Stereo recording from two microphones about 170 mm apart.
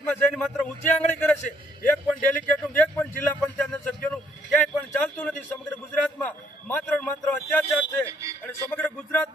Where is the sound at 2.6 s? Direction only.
10° left (ahead or behind).